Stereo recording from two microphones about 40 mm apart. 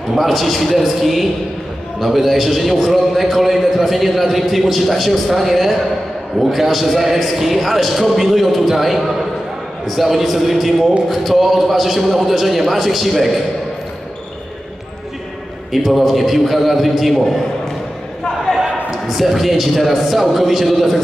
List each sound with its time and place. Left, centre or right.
0.1 s a man's voice: centre
15.7 s a man's voice: centre
18.5 s a sound: centre
19.0 s a man's voice: centre